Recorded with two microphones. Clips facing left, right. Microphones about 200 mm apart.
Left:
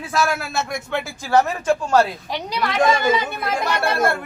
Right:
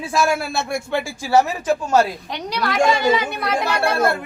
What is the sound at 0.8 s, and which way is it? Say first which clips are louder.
Speech: right 2 dB; 10° right (ahead or behind).